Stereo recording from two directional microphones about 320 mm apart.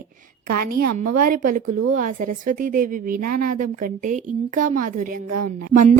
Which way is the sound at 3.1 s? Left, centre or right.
Right.